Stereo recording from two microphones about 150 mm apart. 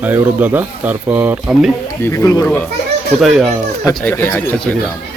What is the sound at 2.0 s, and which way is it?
Speech, 20° left (ahead or behind).